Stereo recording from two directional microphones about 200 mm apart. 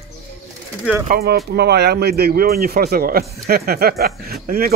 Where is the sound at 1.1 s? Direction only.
50° right (ahead or behind).